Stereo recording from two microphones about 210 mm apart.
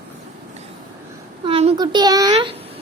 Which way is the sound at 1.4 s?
25° right (ahead or behind).